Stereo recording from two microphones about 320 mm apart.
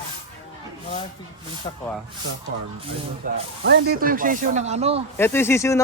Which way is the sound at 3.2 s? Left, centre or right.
Right.